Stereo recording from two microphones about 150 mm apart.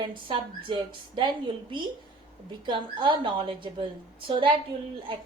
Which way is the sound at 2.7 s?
30° right (ahead or behind).